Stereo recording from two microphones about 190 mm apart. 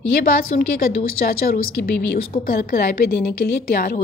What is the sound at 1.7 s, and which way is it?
A woman's voice, 50° left (ahead or behind).